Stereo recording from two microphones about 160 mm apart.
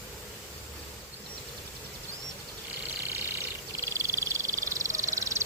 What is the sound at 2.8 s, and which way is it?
Frog, 15° right (ahead or behind).